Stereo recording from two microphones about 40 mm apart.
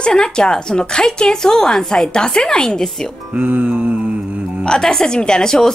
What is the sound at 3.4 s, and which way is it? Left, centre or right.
Music, right.